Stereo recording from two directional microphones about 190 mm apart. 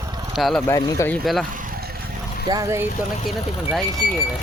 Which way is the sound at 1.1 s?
Centre (ahead or behind).